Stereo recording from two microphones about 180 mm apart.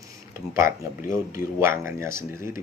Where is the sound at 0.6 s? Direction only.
15° right (ahead or behind).